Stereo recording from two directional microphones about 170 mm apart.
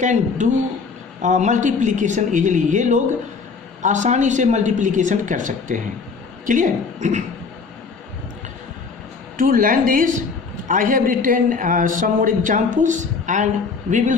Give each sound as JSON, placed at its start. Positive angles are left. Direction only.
{"t": 0.0, "sound": "a woman's voice", "side_deg": -45}
{"t": 9.4, "sound": "a woman's voice", "side_deg": -55}